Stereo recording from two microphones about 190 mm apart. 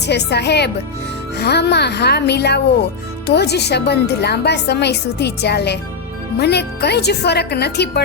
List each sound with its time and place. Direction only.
0.0 s speech: 60° left (ahead or behind)